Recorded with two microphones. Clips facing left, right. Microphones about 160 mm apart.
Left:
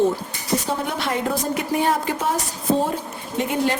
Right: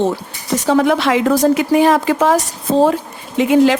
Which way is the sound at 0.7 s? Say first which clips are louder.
Right 11 dB; 90° right.